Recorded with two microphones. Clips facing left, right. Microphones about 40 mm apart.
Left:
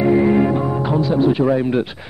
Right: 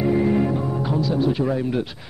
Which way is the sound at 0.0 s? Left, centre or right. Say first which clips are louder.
Left 5 dB; left.